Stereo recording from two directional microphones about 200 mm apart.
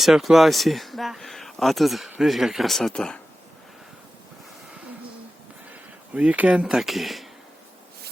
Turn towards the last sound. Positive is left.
turn(degrees=0)  # may be behind; listen again after turning